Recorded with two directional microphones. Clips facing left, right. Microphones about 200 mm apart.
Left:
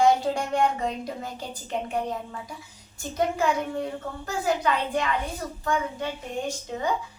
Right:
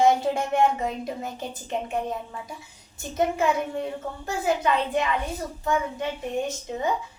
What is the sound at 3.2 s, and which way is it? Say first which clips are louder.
Speech: right 1 dB; 20° right (ahead or behind).